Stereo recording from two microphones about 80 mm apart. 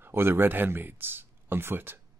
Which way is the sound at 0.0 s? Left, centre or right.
Right.